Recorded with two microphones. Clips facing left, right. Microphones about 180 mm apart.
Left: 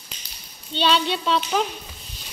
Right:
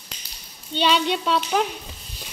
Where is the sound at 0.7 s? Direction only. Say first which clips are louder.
Right 1 dB; 15° right (ahead or behind).